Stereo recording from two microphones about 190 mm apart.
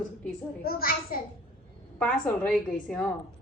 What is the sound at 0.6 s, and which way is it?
Speech, 50° left (ahead or behind).